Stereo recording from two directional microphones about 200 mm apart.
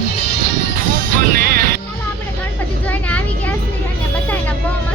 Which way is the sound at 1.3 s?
50° right (ahead or behind).